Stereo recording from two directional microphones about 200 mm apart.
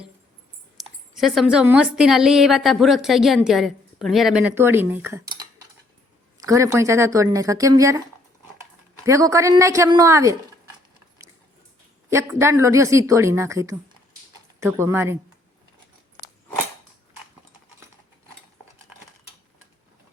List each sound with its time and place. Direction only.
0.8 s a woman's voice: centre (ahead or behind); by 8.0 s 15° right (ahead or behind)
9.0 s speech: 15° right (ahead or behind)
12.1 s speech: 15° right (ahead or behind)